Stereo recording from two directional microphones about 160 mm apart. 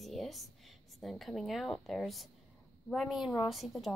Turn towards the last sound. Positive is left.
turn(degrees=0)  # may be behind; listen again after turning